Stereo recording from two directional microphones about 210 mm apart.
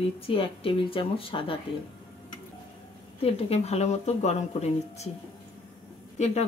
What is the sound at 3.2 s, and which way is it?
Speech, 30° left (ahead or behind).